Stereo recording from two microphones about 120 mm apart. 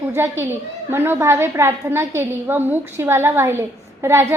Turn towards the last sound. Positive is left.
turn(degrees=-25)  # may be behind; listen again after turning